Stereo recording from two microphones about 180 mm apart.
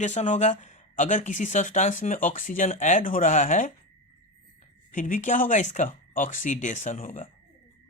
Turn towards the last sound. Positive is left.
turn(degrees=45)  # may be behind; listen again after turning